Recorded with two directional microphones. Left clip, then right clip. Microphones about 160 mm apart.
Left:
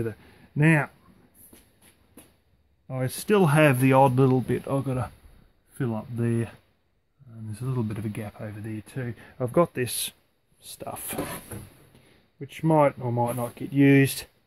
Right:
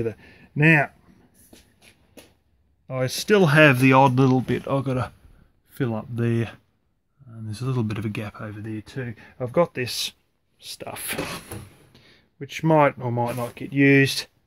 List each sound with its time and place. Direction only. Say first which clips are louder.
0.0 s speech: right 4 dB; 15° left (ahead or behind)
2.9 s speech: right 4 dB; 5° left (ahead or behind); by 8.4 s 10° right (ahead or behind)
8.4 s speech: right 3 dB; 10° left (ahead or behind)
10.6 s speech: right 3 dB; 5° left (ahead or behind)